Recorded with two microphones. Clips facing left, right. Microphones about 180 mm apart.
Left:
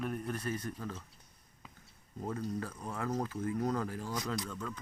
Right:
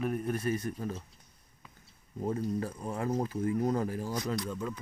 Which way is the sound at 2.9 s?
25° right (ahead or behind).